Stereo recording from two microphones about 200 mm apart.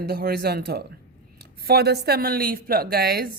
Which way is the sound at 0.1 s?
50° right (ahead or behind).